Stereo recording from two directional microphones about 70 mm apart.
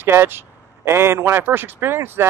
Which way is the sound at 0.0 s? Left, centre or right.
Right.